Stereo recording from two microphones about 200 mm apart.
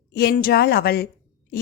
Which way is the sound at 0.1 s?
55° left (ahead or behind).